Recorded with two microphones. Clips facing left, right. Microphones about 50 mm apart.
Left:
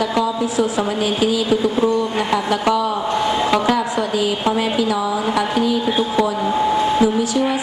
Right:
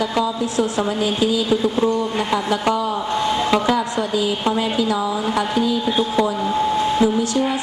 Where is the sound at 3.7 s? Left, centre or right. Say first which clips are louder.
Left 1 dB; left.